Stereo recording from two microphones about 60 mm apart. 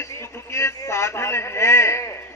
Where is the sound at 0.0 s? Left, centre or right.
Left.